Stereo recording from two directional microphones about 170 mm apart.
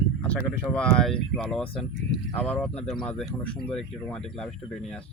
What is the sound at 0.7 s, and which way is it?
Speech, 5° left (ahead or behind).